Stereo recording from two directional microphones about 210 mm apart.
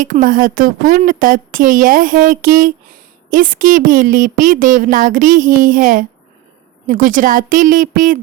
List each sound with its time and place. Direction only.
0.0 s a woman's voice: 40° right (ahead or behind)